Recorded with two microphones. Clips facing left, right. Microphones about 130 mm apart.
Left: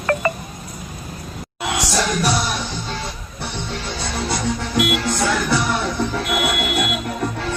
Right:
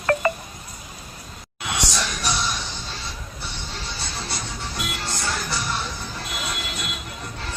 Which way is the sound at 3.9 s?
70° left (ahead or behind).